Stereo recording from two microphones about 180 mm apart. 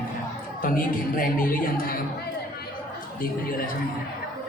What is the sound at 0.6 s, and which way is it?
A woman's voice, 50° left (ahead or behind).